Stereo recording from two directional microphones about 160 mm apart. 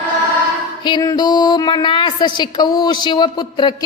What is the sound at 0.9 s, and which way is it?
A woman's voice, 25° left (ahead or behind).